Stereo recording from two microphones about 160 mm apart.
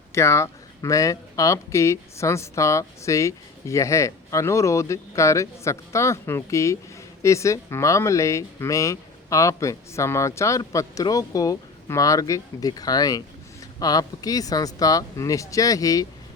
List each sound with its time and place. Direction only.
0.1 s speech: 20° left (ahead or behind)